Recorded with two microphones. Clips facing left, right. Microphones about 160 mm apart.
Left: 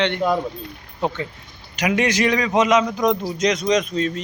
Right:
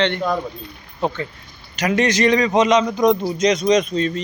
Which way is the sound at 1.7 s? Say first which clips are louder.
Right 2 dB; 10° left (ahead or behind).